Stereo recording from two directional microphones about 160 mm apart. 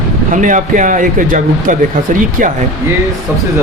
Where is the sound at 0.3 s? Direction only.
55° right (ahead or behind).